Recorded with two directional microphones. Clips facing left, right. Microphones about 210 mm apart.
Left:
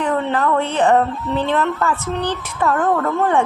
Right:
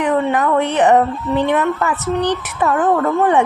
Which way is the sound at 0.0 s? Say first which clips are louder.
Right 3 dB; 15° right (ahead or behind).